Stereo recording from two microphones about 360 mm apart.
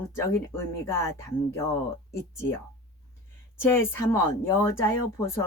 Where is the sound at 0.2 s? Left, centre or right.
Centre.